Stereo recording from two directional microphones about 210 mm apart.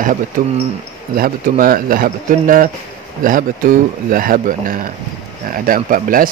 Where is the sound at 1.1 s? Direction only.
45° right (ahead or behind).